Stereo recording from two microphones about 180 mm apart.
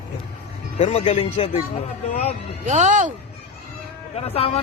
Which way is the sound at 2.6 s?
40° right (ahead or behind).